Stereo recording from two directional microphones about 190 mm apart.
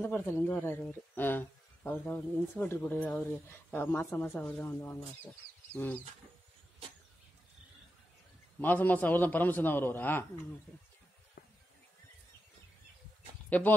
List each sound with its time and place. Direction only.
0.0 s speech: 15° left (ahead or behind)
8.5 s speech: 10° left (ahead or behind)
11.4 s a sound: 55° left (ahead or behind)
13.5 s speech: 10° left (ahead or behind)